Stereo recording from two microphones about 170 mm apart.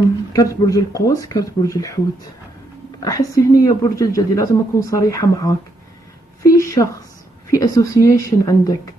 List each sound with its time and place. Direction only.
0.3 s speech: 20° left (ahead or behind)
3.0 s speech: 20° left (ahead or behind)
6.4 s a sound: 20° left (ahead or behind)
7.5 s speech: 20° left (ahead or behind)